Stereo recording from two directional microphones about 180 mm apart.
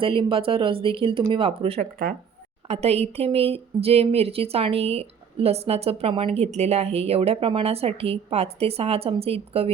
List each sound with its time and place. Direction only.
0.0 s speech: 30° right (ahead or behind)